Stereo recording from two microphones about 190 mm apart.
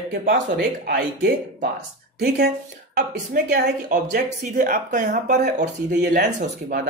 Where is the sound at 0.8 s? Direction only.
55° right (ahead or behind).